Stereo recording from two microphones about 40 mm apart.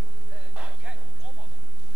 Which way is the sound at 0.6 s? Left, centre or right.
Right.